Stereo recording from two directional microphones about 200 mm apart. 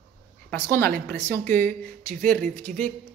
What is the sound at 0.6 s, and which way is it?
Speech, 10° left (ahead or behind).